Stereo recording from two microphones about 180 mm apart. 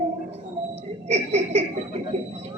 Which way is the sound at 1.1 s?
35° right (ahead or behind).